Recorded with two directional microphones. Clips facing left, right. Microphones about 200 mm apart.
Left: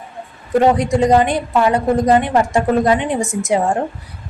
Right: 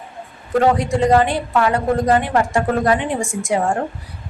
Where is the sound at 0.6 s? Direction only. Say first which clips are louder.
Left 2 dB; 15° left (ahead or behind).